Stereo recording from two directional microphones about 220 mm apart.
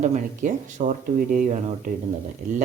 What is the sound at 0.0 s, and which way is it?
Speech, 35° right (ahead or behind).